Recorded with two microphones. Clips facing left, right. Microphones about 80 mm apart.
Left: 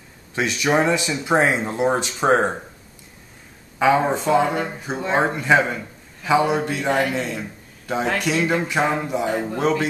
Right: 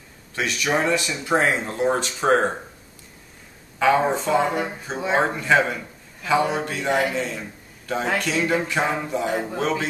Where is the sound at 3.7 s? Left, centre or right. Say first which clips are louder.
Left 1 dB; centre.